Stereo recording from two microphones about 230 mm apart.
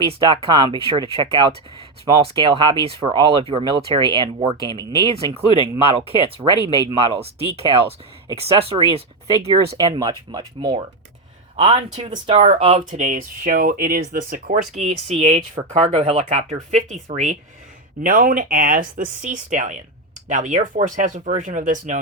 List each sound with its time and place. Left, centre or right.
0.0 s speech: right